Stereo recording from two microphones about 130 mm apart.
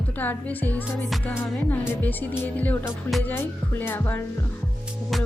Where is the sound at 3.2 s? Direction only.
15° left (ahead or behind).